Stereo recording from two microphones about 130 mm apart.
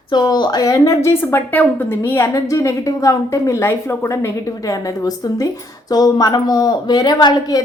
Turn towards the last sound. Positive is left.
turn(degrees=30)  # may be behind; listen again after turning